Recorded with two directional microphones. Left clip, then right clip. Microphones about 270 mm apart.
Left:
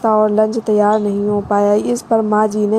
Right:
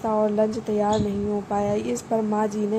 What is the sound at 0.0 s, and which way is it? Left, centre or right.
A woman's voice, left.